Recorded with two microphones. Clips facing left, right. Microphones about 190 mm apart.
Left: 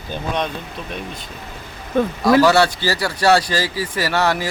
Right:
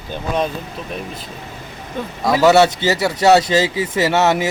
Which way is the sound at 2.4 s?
20° right (ahead or behind).